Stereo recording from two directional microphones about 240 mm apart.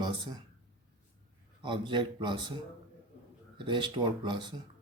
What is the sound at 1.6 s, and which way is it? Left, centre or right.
Speech, centre.